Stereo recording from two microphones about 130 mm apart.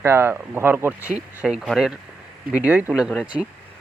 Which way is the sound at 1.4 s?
5° right (ahead or behind).